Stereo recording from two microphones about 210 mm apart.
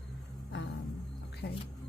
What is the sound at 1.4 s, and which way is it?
Speech, 45° left (ahead or behind).